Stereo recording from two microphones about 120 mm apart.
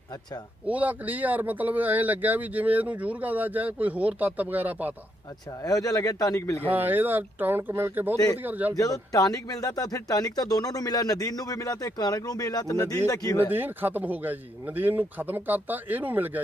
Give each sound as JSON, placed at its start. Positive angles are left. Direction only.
{"t": 0.7, "sound": "speech", "side_deg": -15}
{"t": 5.6, "sound": "speech", "side_deg": 30}
{"t": 6.6, "sound": "speech", "side_deg": -15}
{"t": 8.7, "sound": "speech", "side_deg": 30}
{"t": 13.5, "sound": "speech", "side_deg": -15}